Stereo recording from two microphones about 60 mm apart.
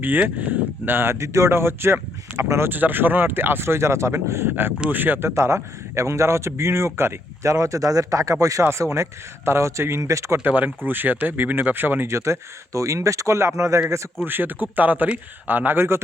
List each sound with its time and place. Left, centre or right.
0.0 s speech: right
0.9 s speech: right
2.6 s speech: right
5.3 s a man's voice: right
8.6 s speech: right
10.4 s speech: right
12.0 s a man's voice: right
14.3 s speech: right